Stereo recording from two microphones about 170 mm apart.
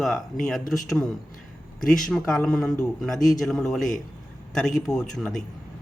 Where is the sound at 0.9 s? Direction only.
Centre (ahead or behind).